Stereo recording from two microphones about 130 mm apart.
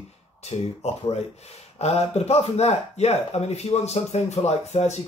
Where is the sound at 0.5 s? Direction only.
45° left (ahead or behind).